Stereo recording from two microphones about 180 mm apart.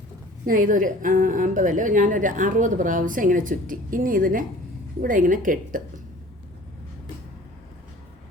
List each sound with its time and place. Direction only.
0.4 s a woman's voice: 50° right (ahead or behind)